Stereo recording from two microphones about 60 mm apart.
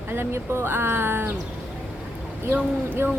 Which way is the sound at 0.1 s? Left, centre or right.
Right.